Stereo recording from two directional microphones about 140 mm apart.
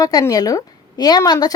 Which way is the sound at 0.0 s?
25° left (ahead or behind).